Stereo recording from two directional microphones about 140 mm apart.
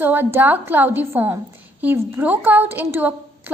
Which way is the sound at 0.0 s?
15° right (ahead or behind).